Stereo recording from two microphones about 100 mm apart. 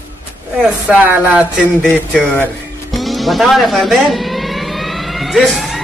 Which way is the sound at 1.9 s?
15° left (ahead or behind).